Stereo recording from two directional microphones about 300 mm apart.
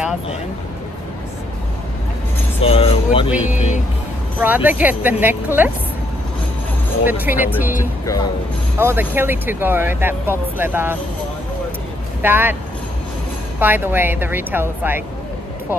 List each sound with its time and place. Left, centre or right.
2.6 s speech: centre
4.4 s speech: centre
7.1 s speech: centre
8.7 s speech: centre
12.2 s speech: centre
13.6 s speech: centre